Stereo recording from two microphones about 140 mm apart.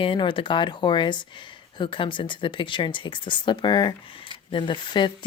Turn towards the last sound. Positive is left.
turn(degrees=35)  # may be behind; listen again after turning